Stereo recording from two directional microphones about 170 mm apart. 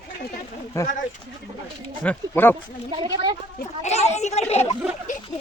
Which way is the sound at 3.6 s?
40° left (ahead or behind).